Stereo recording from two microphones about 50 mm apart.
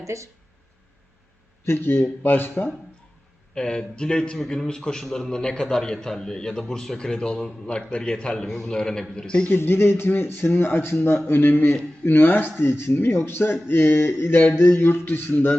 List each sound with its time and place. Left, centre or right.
1.6 s speech: left
3.5 s a man's voice: centre
8.4 s a man's voice: centre
9.5 s speech: left
15.3 s a man's voice: left